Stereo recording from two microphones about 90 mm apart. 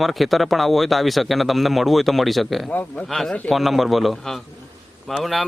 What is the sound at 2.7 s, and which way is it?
Speech, 15° left (ahead or behind).